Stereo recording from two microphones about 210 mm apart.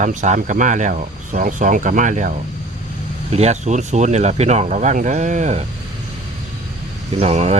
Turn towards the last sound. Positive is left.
turn(degrees=-30)  # may be behind; listen again after turning